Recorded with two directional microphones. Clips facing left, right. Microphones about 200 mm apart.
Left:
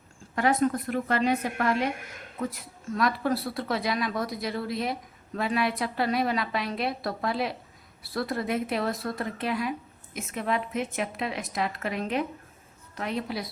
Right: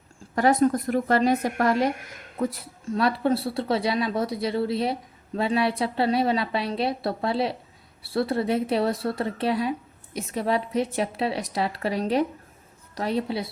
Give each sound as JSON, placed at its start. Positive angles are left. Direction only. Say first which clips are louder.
{"t": 0.3, "sound": "a woman's voice", "louder": "right 4 dB", "side_deg": -40}